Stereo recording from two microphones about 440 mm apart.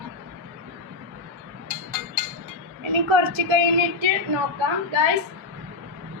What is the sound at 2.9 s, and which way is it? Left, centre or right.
A woman's voice, right.